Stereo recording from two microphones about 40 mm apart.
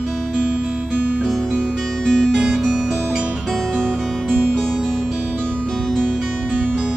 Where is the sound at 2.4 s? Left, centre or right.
Right.